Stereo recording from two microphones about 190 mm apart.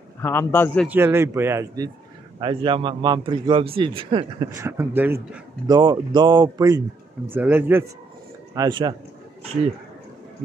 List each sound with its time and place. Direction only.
0.2 s a man's voice: 10° left (ahead or behind)
0.8 s speech: 10° right (ahead or behind)
2.4 s a man's voice: 25° right (ahead or behind)
4.6 s speech: 15° right (ahead or behind)
5.7 s a man's voice: 20° right (ahead or behind)
8.5 s a man's voice: 25° right (ahead or behind)